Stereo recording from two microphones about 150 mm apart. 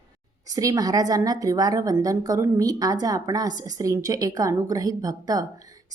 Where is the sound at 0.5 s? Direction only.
25° right (ahead or behind).